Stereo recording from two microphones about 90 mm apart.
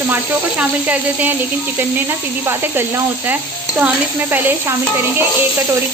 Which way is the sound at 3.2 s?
20° right (ahead or behind).